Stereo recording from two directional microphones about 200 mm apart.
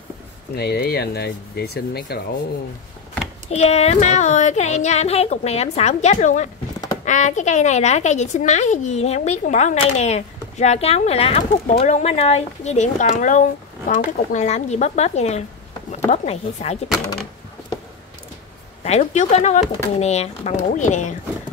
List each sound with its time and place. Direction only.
0.6 s speech: 55° left (ahead or behind)
3.4 s a woman's voice: 30° left (ahead or behind)
18.9 s a woman's voice: 35° left (ahead or behind)